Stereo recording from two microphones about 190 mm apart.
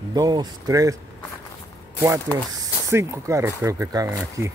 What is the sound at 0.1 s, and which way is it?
Speech, 20° right (ahead or behind).